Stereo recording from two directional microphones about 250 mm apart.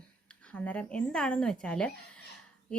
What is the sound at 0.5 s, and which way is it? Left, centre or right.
A woman's voice, centre.